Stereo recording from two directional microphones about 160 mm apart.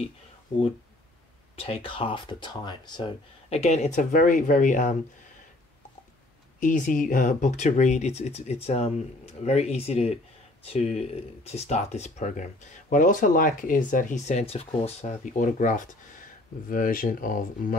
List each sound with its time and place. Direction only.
1.6 s speech: 35° left (ahead or behind)
3.4 s speech: 45° left (ahead or behind)
6.6 s speech: 55° left (ahead or behind)